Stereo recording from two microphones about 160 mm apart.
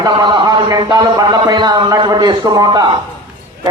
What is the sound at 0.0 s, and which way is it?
A man's voice, 25° right (ahead or behind).